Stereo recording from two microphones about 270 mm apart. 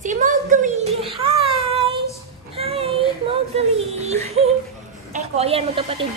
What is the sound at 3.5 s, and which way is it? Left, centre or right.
Speech, right.